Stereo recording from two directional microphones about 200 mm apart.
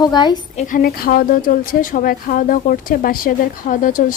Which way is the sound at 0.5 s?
40° left (ahead or behind).